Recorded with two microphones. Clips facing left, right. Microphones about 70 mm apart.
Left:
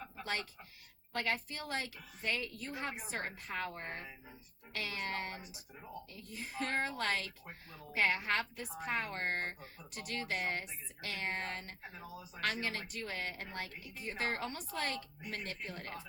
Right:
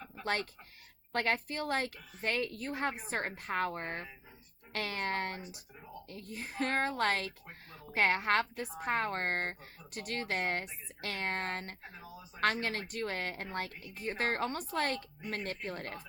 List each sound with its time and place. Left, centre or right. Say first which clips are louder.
1.1 s speech: right 5 dB; right
11.8 s speech: left 1 dB; centre
12.4 s speech: right 6 dB; right